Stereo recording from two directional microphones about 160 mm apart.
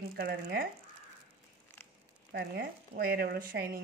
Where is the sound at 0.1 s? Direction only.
75° right (ahead or behind).